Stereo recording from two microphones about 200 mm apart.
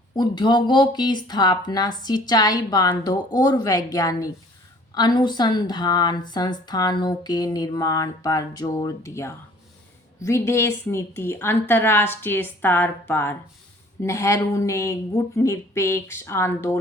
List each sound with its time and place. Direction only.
0.2 s a woman's voice: 20° left (ahead or behind)